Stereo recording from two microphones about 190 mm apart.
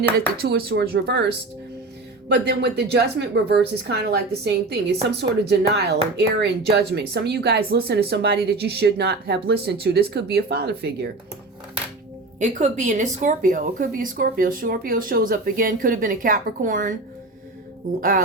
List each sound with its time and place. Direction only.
0.4 s speech: 60° right (ahead or behind)
2.3 s speech: 65° right (ahead or behind)
12.4 s speech: 40° right (ahead or behind)